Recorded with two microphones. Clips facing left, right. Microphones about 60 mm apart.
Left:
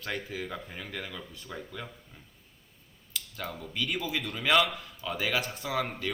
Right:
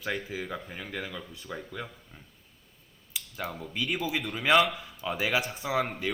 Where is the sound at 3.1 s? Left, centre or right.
Centre.